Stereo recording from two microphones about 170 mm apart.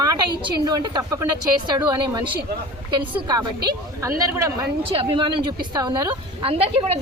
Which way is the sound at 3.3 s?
25° right (ahead or behind).